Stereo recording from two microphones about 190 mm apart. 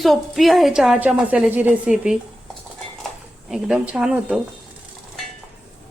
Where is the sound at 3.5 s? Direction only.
5° right (ahead or behind).